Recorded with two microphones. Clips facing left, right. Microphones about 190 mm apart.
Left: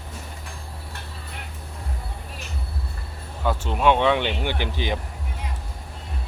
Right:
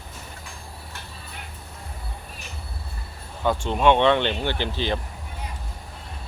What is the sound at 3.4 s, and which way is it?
Speech, 5° left (ahead or behind).